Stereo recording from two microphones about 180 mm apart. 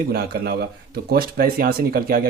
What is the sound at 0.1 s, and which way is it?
Speech, 60° right (ahead or behind).